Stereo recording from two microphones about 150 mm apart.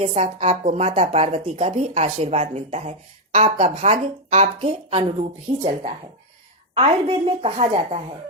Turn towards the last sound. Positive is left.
turn(degrees=-40)  # may be behind; listen again after turning